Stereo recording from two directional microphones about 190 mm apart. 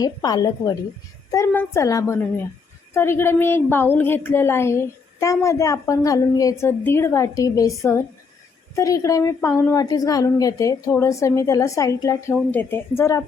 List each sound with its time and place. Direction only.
0.0 s a woman's voice: 20° left (ahead or behind)